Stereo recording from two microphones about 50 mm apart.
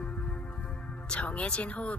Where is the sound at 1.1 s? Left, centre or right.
Left.